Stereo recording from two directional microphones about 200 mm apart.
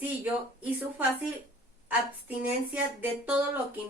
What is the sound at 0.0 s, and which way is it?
Speech, 10° right (ahead or behind).